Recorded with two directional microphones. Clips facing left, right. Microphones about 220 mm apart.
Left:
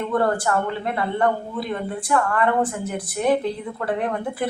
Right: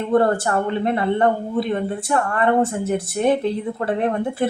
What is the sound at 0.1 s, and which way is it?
Speech, 25° right (ahead or behind).